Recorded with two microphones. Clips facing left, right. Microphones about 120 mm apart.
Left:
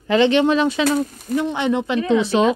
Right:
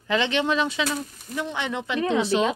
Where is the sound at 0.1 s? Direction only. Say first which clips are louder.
Left 8 dB; 45° left (ahead or behind).